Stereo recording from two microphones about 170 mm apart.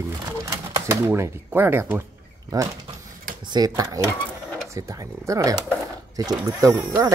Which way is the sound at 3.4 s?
25° right (ahead or behind).